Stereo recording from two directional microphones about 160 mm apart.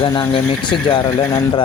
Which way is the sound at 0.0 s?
30° left (ahead or behind).